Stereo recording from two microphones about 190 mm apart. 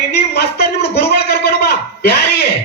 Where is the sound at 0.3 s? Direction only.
60° left (ahead or behind).